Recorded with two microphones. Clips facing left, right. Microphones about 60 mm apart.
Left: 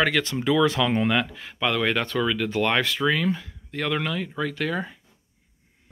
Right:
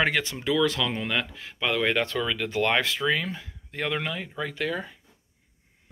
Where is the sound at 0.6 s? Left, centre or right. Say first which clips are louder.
Left 4 dB; left.